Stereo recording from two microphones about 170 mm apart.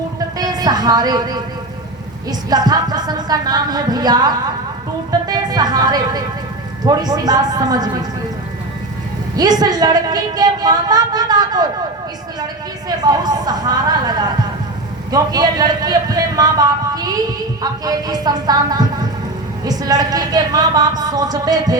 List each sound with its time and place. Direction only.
0.3 s music: 25° right (ahead or behind)
2.5 s a woman's voice: 25° right (ahead or behind)
9.3 s a woman's voice: 20° right (ahead or behind)
13.0 s a woman's voice: 25° right (ahead or behind)